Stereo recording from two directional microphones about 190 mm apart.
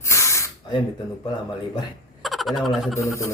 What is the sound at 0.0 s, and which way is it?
Spray, 15° left (ahead or behind).